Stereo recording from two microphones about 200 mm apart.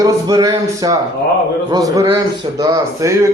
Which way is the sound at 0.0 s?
20° right (ahead or behind).